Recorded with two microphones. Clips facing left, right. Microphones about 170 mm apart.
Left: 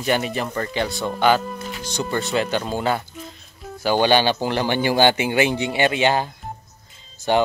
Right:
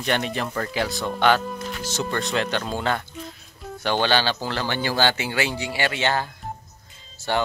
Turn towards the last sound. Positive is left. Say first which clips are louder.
# left 6 dB
turn(degrees=20)  # may be behind; listen again after turning